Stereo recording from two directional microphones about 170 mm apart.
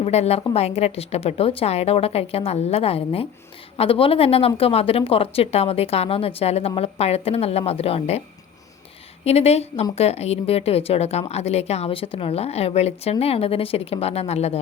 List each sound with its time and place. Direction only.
0.0 s a woman's voice: 40° left (ahead or behind)
9.2 s a woman's voice: 35° left (ahead or behind)